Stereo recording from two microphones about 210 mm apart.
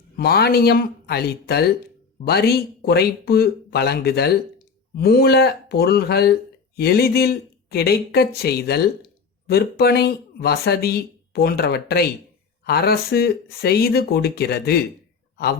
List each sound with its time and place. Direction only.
0.2 s speech: 50° left (ahead or behind)